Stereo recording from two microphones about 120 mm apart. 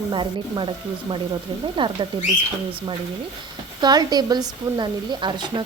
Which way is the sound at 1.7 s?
45° right (ahead or behind).